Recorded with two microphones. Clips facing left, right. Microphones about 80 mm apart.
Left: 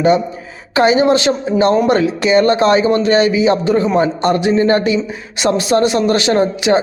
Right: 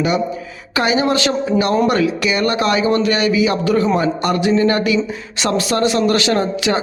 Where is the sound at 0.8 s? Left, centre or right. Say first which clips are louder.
Left 5 dB; left.